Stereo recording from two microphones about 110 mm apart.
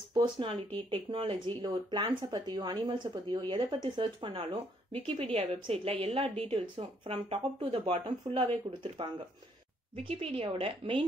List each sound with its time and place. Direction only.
0.1 s speech: 45° right (ahead or behind)
10.0 s speech: 55° right (ahead or behind)